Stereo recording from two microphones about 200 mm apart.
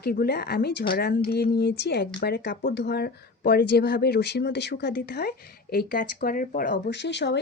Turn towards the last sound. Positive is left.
turn(degrees=60)  # may be behind; listen again after turning